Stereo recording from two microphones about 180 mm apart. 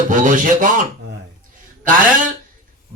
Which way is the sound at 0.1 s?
45° right (ahead or behind).